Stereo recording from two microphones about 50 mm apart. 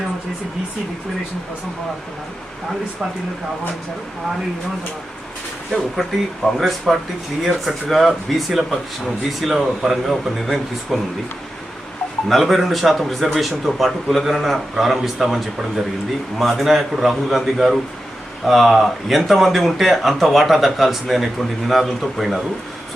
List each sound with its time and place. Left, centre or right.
6.0 s a man's voice: centre
12.3 s a man's voice: centre